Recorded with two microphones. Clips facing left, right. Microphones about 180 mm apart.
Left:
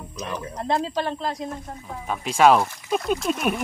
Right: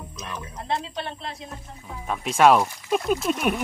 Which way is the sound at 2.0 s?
Centre (ahead or behind).